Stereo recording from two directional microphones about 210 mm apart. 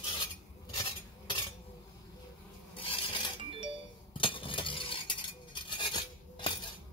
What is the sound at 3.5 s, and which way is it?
Music, 25° right (ahead or behind).